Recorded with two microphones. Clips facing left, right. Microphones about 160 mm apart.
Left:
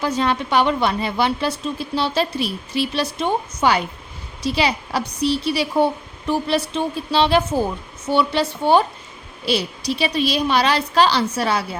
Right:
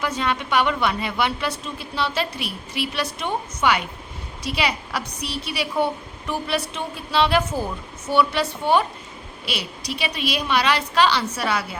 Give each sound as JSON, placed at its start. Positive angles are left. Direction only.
{"t": 0.0, "sound": "a woman's voice", "side_deg": 35}